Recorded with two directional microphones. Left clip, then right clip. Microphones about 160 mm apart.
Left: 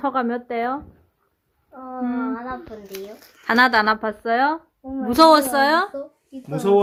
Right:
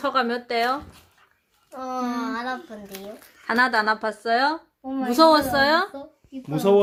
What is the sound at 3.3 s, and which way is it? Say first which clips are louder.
Speech: left 4 dB; 25° left (ahead or behind).